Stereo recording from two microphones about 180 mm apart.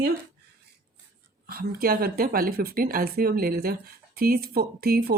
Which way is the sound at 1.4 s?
55° right (ahead or behind).